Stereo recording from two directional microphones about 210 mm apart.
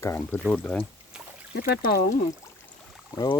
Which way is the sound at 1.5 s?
50° left (ahead or behind).